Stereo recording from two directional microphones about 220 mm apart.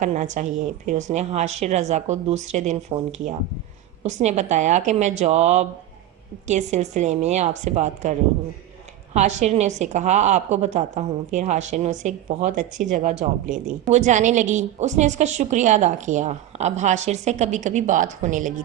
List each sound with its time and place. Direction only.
0.0 s a woman's voice: 35° right (ahead or behind)
9.1 s a woman's voice: 30° right (ahead or behind)